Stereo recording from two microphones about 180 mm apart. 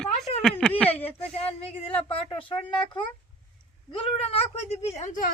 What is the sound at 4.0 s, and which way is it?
Speech, 35° left (ahead or behind).